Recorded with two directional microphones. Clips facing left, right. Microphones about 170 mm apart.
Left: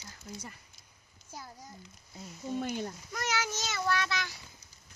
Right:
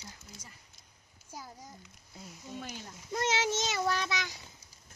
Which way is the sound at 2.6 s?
55° left (ahead or behind).